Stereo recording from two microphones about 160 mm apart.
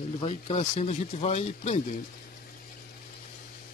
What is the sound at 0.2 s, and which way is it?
Speech, 40° left (ahead or behind).